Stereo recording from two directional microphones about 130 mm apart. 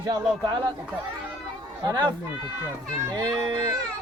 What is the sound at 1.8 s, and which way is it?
Speech, 30° right (ahead or behind).